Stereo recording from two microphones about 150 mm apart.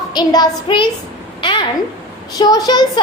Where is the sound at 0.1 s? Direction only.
25° left (ahead or behind).